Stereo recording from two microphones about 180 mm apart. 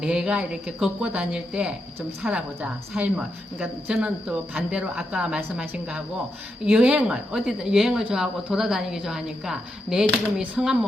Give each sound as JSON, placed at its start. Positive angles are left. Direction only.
{"t": 0.0, "sound": "speech", "side_deg": -5}